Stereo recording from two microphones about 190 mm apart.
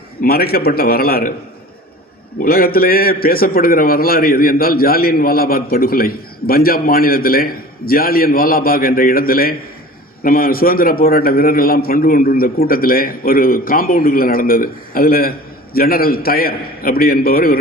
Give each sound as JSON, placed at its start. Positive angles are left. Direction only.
{"t": 0.2, "sound": "a man's voice", "side_deg": 55}
{"t": 2.4, "sound": "a man's voice", "side_deg": 50}